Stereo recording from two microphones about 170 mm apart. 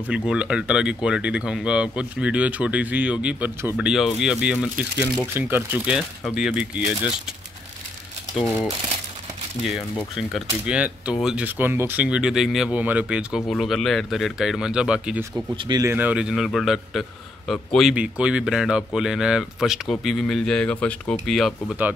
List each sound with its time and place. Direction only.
0.0 s speech: 5° right (ahead or behind)
8.4 s speech: 5° right (ahead or behind)
15.5 s speech: 25° right (ahead or behind)
15.9 s speech: 10° right (ahead or behind)